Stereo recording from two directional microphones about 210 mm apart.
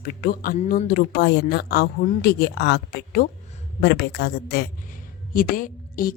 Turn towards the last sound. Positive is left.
turn(degrees=40)  # may be behind; listen again after turning